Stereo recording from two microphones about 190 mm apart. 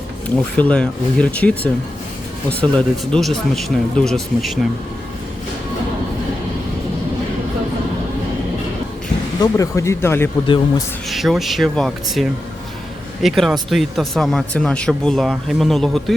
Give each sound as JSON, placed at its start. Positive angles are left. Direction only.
{"t": 0.3, "sound": "speech", "side_deg": 5}
{"t": 3.1, "sound": "speech", "side_deg": 0}
{"t": 9.4, "sound": "speech", "side_deg": 15}
{"t": 10.4, "sound": "a man's voice", "side_deg": 25}
{"t": 11.1, "sound": "speech", "side_deg": 0}